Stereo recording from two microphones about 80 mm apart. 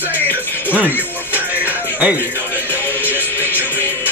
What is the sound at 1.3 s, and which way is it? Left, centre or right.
Music, right.